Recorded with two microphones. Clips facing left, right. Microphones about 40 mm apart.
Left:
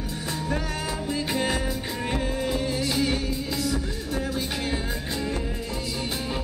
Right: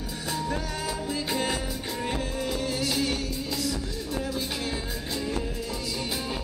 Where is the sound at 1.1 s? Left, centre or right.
Centre.